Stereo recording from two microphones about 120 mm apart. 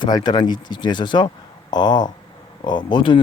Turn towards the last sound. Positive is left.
turn(degrees=40)  # may be behind; listen again after turning